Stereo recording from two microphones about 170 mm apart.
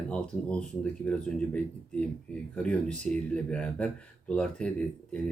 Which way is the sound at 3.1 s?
5° left (ahead or behind).